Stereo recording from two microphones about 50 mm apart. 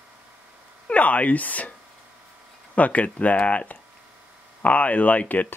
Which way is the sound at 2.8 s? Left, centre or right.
Left.